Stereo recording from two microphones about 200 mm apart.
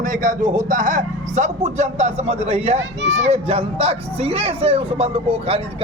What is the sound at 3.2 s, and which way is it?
Speech, 30° right (ahead or behind).